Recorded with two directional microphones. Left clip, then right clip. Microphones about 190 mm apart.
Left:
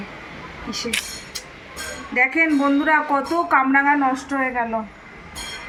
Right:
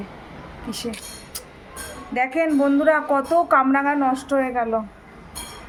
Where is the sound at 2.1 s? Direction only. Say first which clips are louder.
Left 2 dB; 65° right (ahead or behind).